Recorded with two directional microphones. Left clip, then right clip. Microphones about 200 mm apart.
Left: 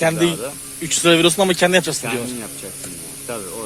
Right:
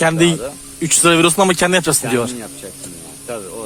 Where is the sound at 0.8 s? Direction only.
35° right (ahead or behind).